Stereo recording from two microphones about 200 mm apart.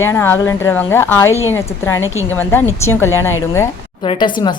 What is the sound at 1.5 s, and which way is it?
Speech, 10° left (ahead or behind).